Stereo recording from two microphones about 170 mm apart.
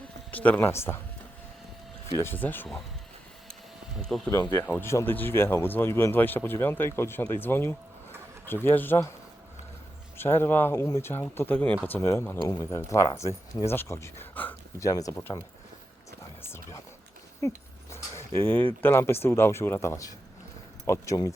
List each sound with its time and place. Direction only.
0.3 s speech: 10° left (ahead or behind)
2.1 s speech: 10° left (ahead or behind)
4.3 s speech: 15° left (ahead or behind)
10.2 s speech: 15° left (ahead or behind)
16.4 s a sound: 15° left (ahead or behind)
17.4 s speech: 20° left (ahead or behind)